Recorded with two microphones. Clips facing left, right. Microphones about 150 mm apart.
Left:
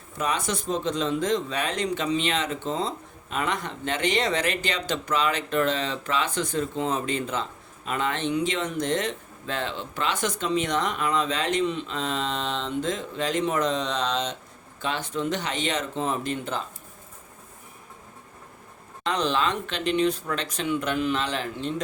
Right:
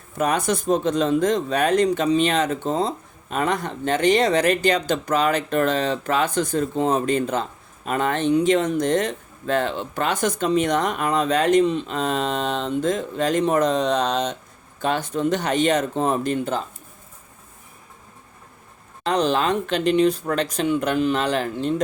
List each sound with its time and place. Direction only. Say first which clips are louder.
0.2 s speech: right 6 dB; 45° right (ahead or behind)
19.0 s speech: right 5 dB; 35° right (ahead or behind)